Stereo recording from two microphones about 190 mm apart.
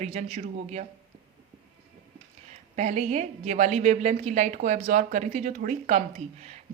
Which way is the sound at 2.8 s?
35° right (ahead or behind).